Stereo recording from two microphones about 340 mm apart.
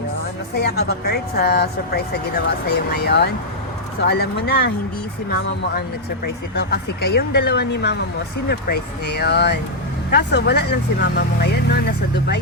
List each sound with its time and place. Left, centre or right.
0.5 s a woman's voice: left
6.2 s a woman's voice: left